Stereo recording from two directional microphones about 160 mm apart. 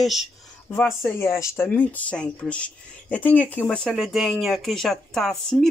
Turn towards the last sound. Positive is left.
turn(degrees=0)  # may be behind; listen again after turning